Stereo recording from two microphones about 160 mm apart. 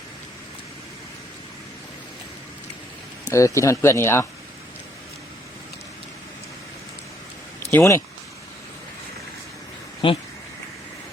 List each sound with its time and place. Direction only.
3.3 s speech: 20° left (ahead or behind)
7.7 s speech: 15° left (ahead or behind)
10.0 s speech: 35° left (ahead or behind)